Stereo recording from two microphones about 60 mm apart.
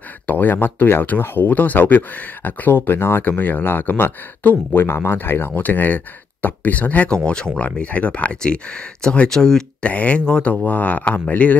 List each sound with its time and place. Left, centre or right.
0.3 s speech: left; by 9.8 s centre
9.8 s speech: left